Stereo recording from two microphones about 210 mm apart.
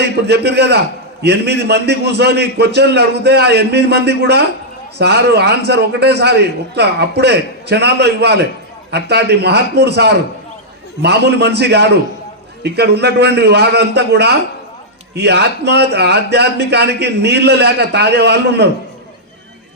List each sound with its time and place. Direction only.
0.3 s a man's voice: 50° right (ahead or behind)